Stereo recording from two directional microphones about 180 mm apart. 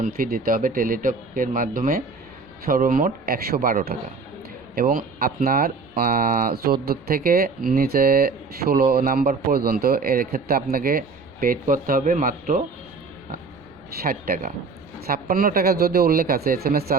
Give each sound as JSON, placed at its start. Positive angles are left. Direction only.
{"t": 0.0, "sound": "speech", "side_deg": -55}
{"t": 14.0, "sound": "speech", "side_deg": -55}